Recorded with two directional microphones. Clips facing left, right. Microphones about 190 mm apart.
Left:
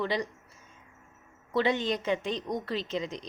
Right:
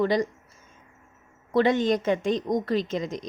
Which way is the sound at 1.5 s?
45° right (ahead or behind).